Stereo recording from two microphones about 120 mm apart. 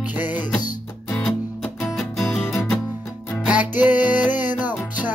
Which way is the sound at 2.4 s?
20° left (ahead or behind).